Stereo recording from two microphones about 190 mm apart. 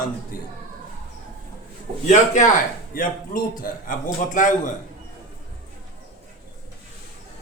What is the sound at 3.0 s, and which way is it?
A man's voice, 45° left (ahead or behind).